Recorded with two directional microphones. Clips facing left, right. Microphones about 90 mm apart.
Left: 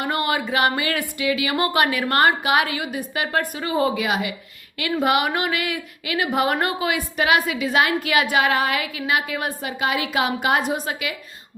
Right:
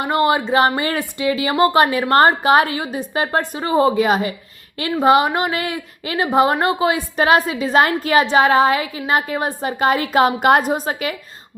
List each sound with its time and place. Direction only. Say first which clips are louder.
0.0 s a woman's voice: right 6 dB; 25° right (ahead or behind); by 11.1 s 40° right (ahead or behind)